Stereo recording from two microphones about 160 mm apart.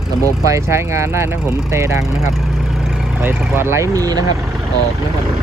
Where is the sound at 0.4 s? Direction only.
20° right (ahead or behind).